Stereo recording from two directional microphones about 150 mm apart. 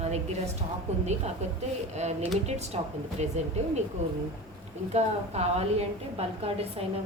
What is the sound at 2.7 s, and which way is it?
Speech, 45° right (ahead or behind).